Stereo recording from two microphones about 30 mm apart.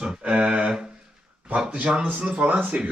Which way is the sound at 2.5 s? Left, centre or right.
Right.